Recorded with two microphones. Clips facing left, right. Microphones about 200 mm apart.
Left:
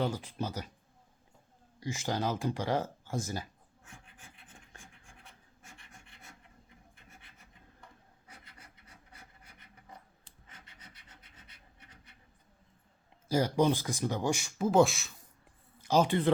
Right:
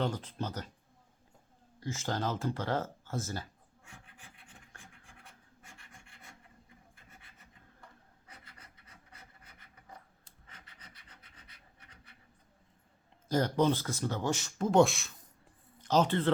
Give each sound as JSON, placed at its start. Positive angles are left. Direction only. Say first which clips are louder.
{"t": 0.0, "sound": "speech", "louder": "left 1 dB", "side_deg": 10}
{"t": 1.8, "sound": "speech", "louder": "left 1 dB", "side_deg": 15}
{"t": 4.7, "sound": "scratch", "louder": "left 1 dB", "side_deg": 20}
{"t": 13.2, "sound": "speech", "louder": "left 1 dB", "side_deg": 10}